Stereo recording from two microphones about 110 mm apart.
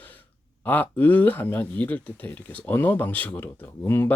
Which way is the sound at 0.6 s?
15° left (ahead or behind).